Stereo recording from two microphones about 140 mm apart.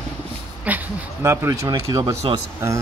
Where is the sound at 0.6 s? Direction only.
15° right (ahead or behind).